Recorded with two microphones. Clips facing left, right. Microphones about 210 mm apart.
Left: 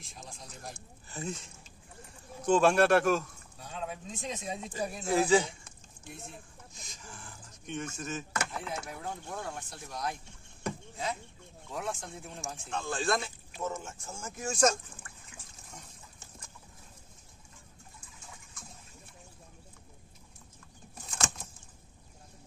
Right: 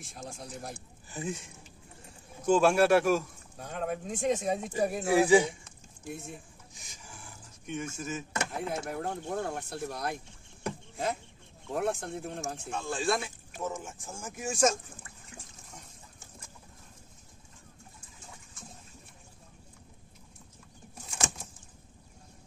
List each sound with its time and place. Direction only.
0.0 s speech: 50° right (ahead or behind)
1.0 s speech: 15° right (ahead or behind)
3.5 s speech: 55° right (ahead or behind)
5.0 s speech: 15° right (ahead or behind)
6.7 s a sound: 15° right (ahead or behind)
8.5 s speech: 45° right (ahead or behind)
11.7 s speech: 60° right (ahead or behind)
12.7 s speech: 5° right (ahead or behind)
21.0 s a sound: 10° right (ahead or behind)